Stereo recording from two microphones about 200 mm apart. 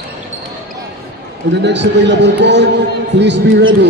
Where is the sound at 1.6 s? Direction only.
60° right (ahead or behind).